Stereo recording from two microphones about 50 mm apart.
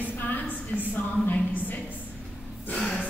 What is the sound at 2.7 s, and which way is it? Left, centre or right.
Gasp, centre.